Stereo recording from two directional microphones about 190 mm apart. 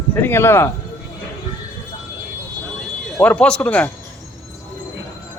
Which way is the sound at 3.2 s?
5° left (ahead or behind).